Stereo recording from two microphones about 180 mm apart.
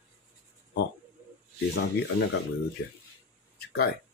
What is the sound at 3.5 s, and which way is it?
Speech, 60° left (ahead or behind).